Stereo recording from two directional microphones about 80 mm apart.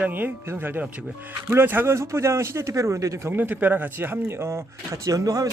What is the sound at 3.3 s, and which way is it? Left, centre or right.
Speech, right.